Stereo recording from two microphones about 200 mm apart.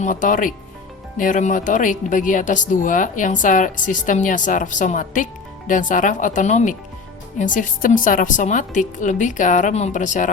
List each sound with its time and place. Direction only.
0.0 s speech: 40° left (ahead or behind)